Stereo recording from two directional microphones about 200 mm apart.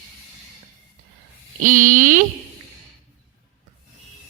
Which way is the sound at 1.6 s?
40° right (ahead or behind).